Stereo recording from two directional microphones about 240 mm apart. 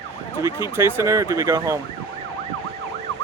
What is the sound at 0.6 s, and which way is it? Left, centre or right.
Speech, centre.